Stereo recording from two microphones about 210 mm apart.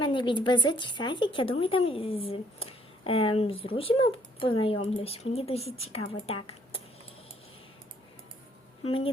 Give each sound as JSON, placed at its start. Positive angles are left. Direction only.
{"t": 0.0, "sound": "speech", "side_deg": 20}
{"t": 8.8, "sound": "speech", "side_deg": 25}